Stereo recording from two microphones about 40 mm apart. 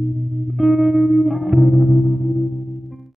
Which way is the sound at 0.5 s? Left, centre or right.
Centre.